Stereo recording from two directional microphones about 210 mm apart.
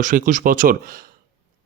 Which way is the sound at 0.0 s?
40° right (ahead or behind).